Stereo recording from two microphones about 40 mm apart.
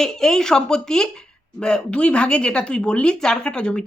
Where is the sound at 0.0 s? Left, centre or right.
Centre.